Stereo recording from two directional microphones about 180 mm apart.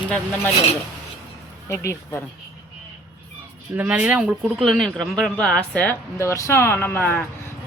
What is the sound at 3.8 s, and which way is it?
Speech, 5° right (ahead or behind).